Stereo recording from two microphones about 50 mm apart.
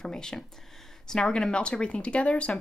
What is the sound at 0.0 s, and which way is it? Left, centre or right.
Speech, centre.